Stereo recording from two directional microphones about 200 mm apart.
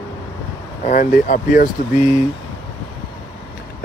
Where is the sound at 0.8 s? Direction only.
40° left (ahead or behind).